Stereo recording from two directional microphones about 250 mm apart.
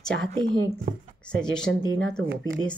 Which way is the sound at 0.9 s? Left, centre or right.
Right.